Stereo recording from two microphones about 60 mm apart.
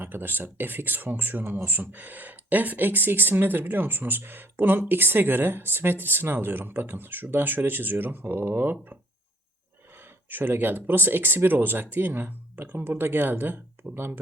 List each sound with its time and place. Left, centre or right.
0.0 s speech: right
10.0 s speech: right